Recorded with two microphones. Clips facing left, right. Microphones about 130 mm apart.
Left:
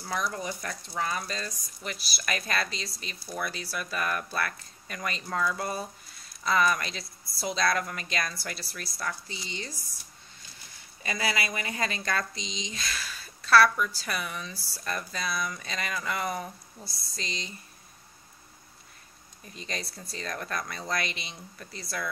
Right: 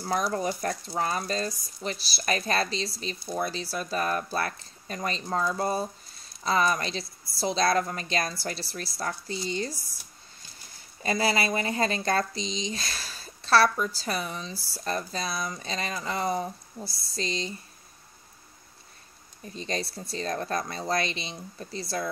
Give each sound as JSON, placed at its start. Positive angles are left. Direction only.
{"t": 0.0, "sound": "speech", "side_deg": -35}
{"t": 11.0, "sound": "speech", "side_deg": -35}
{"t": 19.4, "sound": "speech", "side_deg": -30}